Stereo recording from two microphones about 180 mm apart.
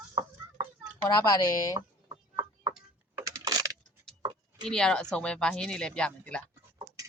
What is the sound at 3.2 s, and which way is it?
Computer keyboard, 20° right (ahead or behind).